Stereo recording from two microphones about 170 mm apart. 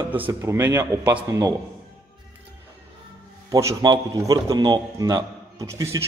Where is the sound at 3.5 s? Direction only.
20° right (ahead or behind).